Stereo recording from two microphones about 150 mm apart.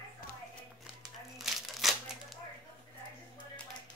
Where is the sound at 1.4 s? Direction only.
Centre (ahead or behind).